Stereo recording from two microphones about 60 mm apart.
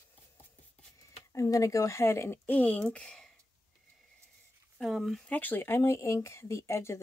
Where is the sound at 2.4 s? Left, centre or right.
Left.